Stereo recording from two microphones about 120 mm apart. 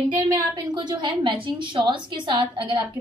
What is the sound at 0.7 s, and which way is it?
A woman's voice, 40° right (ahead or behind).